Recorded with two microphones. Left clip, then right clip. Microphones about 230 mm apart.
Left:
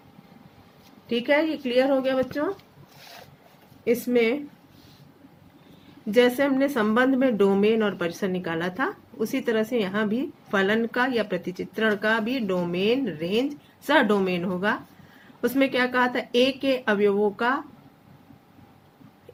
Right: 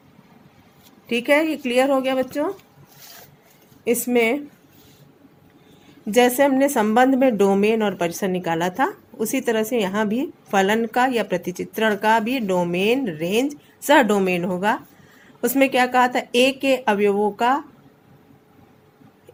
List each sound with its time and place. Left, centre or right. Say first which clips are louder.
1.0 s a woman's voice: right 4 dB; right
3.8 s a woman's voice: right 3 dB; right
6.1 s a woman's voice: right 4 dB; right